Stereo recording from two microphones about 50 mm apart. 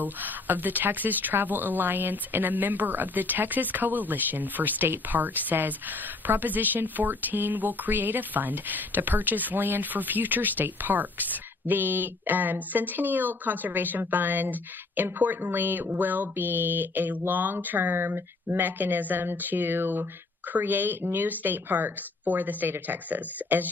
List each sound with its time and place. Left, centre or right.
0.0 s speech: right